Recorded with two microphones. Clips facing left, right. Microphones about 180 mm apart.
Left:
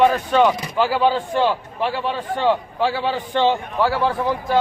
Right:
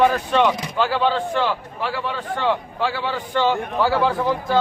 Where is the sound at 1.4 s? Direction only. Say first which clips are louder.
Left 3 dB; 20° left (ahead or behind).